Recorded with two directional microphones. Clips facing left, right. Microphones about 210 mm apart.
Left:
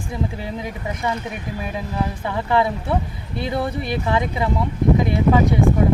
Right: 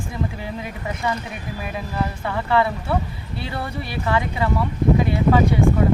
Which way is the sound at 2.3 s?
15° left (ahead or behind).